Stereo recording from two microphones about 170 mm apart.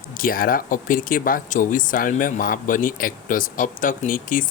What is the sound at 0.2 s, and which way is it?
Speech, 55° left (ahead or behind).